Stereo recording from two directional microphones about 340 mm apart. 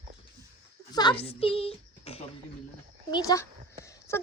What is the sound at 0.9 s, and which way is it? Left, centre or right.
A woman's voice, centre.